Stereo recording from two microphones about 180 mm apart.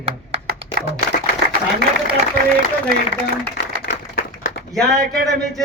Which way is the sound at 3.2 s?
65° left (ahead or behind).